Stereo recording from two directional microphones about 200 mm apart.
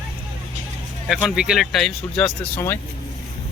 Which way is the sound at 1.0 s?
Centre (ahead or behind).